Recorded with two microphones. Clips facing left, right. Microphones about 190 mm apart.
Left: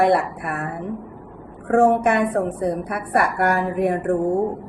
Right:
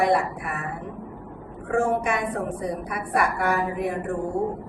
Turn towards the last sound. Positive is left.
turn(degrees=60)  # may be behind; listen again after turning